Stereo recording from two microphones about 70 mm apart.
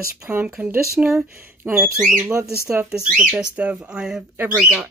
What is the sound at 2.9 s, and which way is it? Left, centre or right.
Speech, centre.